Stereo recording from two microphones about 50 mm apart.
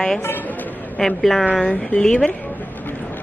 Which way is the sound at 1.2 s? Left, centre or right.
Centre.